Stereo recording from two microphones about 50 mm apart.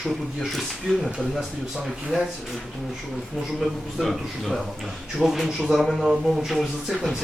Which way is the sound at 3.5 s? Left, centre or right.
Centre.